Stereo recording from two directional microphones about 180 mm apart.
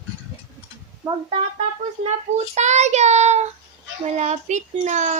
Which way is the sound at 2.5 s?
40° right (ahead or behind).